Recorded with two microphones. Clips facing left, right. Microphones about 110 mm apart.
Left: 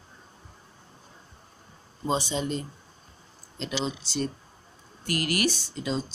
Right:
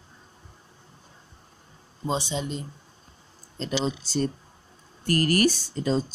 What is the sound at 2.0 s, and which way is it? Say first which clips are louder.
Speech: left 1 dB; 20° right (ahead or behind).